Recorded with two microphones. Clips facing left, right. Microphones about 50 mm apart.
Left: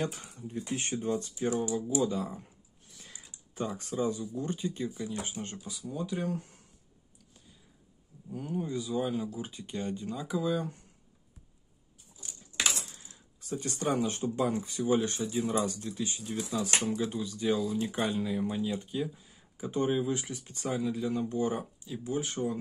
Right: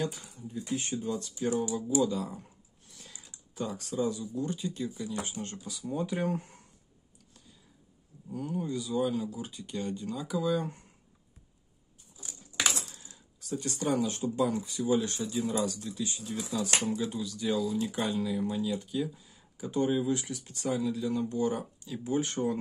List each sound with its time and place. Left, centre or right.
0.0 s speech: left
1.7 s speech: left
5.6 s speech: centre
5.9 s speech: centre
8.3 s speech: centre
8.6 s speech: left
13.4 s speech: left
14.2 s speech: left
21.8 s speech: centre